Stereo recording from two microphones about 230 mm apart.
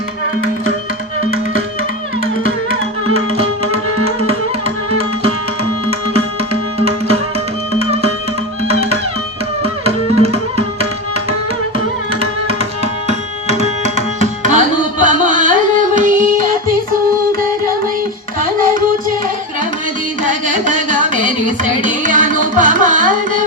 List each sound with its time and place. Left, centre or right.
3.3 s tabla: right
6.7 s music: right
9.8 s tabla: right
12.5 s tabla: right
18.3 s music: right
20.2 s carnatic music: right